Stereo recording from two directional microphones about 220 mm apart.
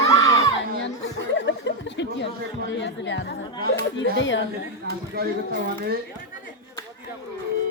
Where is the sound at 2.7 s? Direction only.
55° left (ahead or behind).